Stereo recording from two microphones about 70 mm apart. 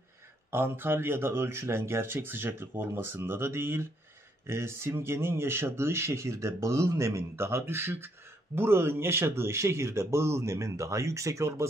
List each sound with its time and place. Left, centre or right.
0.5 s speech: right